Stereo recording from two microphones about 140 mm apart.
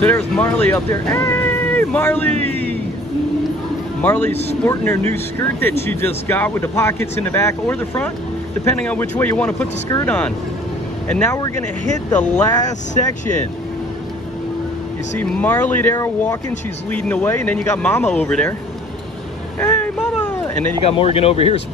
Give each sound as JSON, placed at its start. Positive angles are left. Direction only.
{"t": 0.0, "sound": "speech", "side_deg": 20}
{"t": 4.0, "sound": "speech", "side_deg": 15}
{"t": 12.4, "sound": "speech", "side_deg": 25}
{"t": 15.1, "sound": "speech", "side_deg": 10}
{"t": 16.9, "sound": "speech", "side_deg": 10}
{"t": 19.6, "sound": "vehicle", "side_deg": 15}
{"t": 20.8, "sound": "speech", "side_deg": 45}